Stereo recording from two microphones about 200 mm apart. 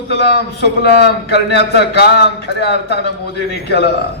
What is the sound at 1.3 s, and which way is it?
A man's voice, 55° left (ahead or behind).